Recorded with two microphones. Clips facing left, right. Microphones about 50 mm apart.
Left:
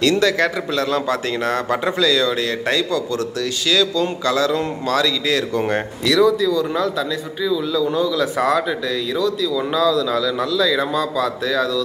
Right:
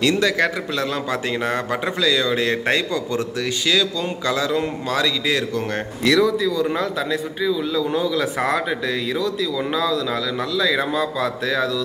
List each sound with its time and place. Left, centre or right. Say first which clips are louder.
0.0 s a man's voice: left 2 dB; centre
5.5 s speech: left 4 dB; centre
6.0 s a man's voice: left 2 dB; centre